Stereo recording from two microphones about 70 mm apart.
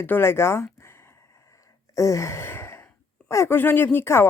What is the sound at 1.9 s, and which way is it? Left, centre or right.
Sigh, left.